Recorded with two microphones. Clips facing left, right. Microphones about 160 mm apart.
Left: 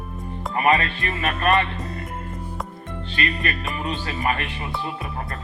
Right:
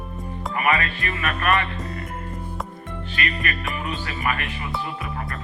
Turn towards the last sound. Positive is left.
turn(degrees=35)  # may be behind; listen again after turning